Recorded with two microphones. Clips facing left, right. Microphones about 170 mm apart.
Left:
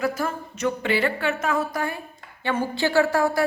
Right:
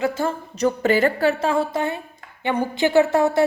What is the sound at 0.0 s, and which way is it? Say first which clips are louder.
A woman's voice: right 3 dB; 25° right (ahead or behind).